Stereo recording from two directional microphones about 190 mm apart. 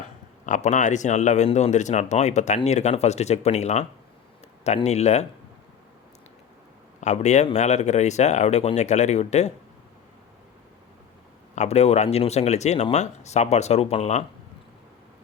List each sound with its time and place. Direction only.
0.4 s speech: 40° left (ahead or behind)
7.0 s speech: 35° left (ahead or behind)
11.5 s speech: 35° left (ahead or behind)